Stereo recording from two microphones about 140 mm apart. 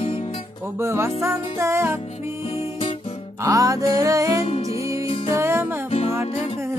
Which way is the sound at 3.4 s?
25° right (ahead or behind).